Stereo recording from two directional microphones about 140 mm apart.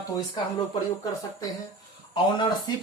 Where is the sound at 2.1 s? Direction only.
35° left (ahead or behind).